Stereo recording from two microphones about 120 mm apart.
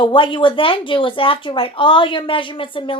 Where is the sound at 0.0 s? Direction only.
45° left (ahead or behind).